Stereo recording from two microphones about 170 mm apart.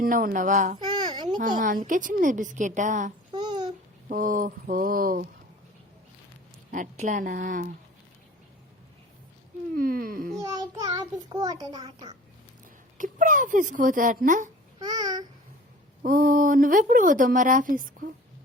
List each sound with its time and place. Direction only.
0.0 s speech: 55° right (ahead or behind)
0.9 s a sound: 25° right (ahead or behind)
1.4 s speech: 50° right (ahead or behind)
3.3 s babbling: 25° right (ahead or behind)
4.1 s mantra: 55° right (ahead or behind)
6.7 s speech: 50° right (ahead or behind)
9.7 s mantra: 60° right (ahead or behind)
10.4 s a child's voice: 20° right (ahead or behind)
13.0 s speech: 50° right (ahead or behind)
14.8 s a child's voice: 25° right (ahead or behind)
16.0 s speech: 55° right (ahead or behind)